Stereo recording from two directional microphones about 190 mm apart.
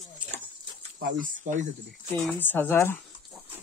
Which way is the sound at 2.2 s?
10° left (ahead or behind).